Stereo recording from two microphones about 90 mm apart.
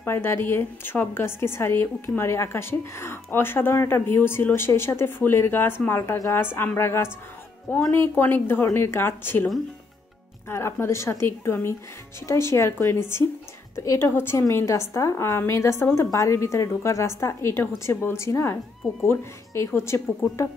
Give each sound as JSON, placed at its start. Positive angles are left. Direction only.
{"t": 0.0, "sound": "a woman's voice", "side_deg": 25}
{"t": 10.5, "sound": "a woman's voice", "side_deg": 30}